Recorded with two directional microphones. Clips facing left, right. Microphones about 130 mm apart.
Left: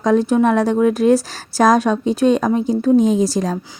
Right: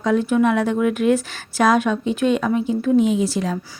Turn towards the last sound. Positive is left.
turn(degrees=40)  # may be behind; listen again after turning